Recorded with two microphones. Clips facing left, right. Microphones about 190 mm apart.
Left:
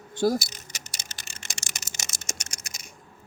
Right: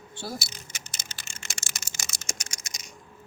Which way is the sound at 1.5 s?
20° left (ahead or behind).